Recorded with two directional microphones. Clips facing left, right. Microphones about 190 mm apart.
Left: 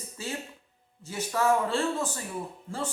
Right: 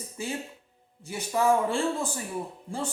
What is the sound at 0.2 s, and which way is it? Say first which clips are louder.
Speech: right 2 dB; 15° right (ahead or behind).